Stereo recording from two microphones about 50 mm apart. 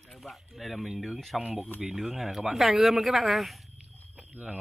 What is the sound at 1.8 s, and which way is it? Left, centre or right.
Speech, centre.